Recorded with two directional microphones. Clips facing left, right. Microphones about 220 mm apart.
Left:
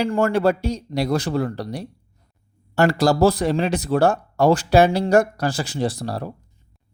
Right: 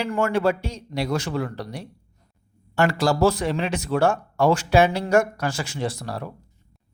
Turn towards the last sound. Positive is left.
turn(degrees=35)  # may be behind; listen again after turning